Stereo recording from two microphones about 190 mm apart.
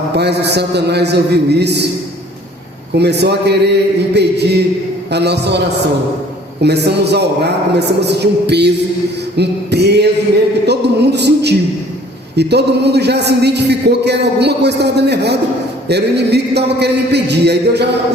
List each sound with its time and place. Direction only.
0.2 s a man's voice: 60° right (ahead or behind)
3.0 s a man's voice: 60° right (ahead or behind)